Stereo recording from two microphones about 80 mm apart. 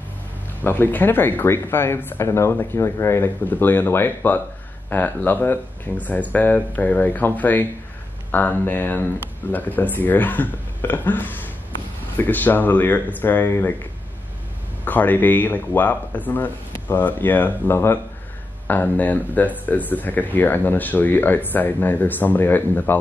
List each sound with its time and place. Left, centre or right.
0.7 s speech: left
14.9 s speech: left